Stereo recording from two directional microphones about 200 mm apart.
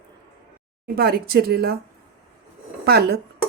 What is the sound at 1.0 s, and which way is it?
Speech, 50° right (ahead or behind).